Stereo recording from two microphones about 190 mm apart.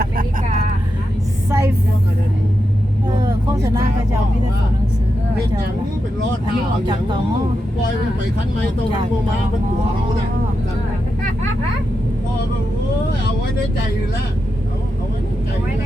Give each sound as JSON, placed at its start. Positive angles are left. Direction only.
{"t": 1.5, "sound": "vehicle", "side_deg": -15}
{"t": 3.2, "sound": "vehicle", "side_deg": -20}